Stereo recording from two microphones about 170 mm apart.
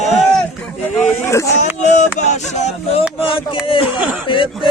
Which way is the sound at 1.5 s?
45° left (ahead or behind).